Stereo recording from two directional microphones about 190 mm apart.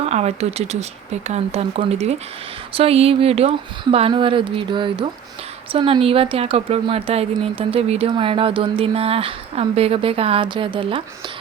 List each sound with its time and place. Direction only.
0.0 s speech: 35° right (ahead or behind)